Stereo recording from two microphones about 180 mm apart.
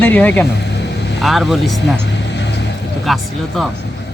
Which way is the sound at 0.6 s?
70° left (ahead or behind).